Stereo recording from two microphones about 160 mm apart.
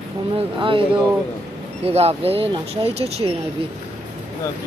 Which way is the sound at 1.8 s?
40° right (ahead or behind).